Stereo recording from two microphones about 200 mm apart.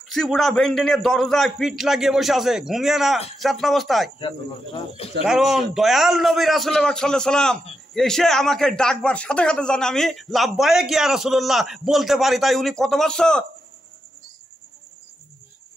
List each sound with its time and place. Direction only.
0.0 s a man's voice: centre (ahead or behind)
4.7 s speech: 30° left (ahead or behind)
5.2 s a man's voice: centre (ahead or behind)